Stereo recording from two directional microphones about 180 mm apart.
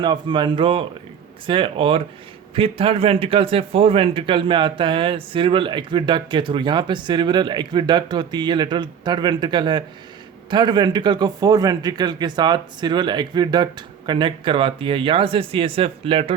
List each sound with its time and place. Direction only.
0.0 s a man's voice: 25° right (ahead or behind)